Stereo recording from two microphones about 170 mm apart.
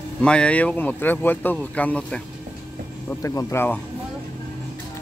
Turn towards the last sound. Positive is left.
turn(degrees=15)  # may be behind; listen again after turning